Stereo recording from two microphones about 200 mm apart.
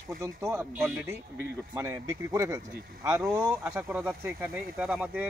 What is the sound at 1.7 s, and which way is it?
Speech, 15° right (ahead or behind).